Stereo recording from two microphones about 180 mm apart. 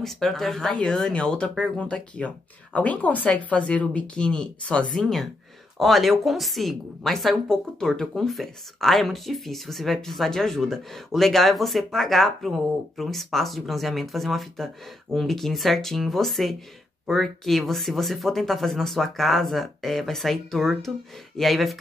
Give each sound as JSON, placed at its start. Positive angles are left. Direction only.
{"t": 0.0, "sound": "a woman's voice", "side_deg": 0}